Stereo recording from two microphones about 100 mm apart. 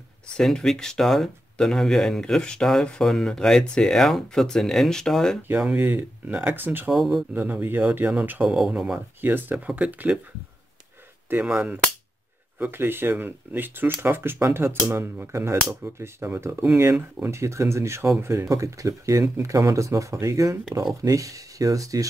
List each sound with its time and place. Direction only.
0.4 s speech: 5° left (ahead or behind)
5.6 s speech: 15° right (ahead or behind)
6.9 s speech: centre (ahead or behind)
7.3 s speech: 20° right (ahead or behind)
9.2 s speech: 20° right (ahead or behind)
11.4 s speech: 15° right (ahead or behind); by 22.0 s 35° right (ahead or behind)